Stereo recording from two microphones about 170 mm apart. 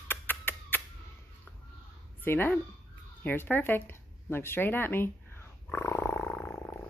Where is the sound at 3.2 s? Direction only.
10° left (ahead or behind).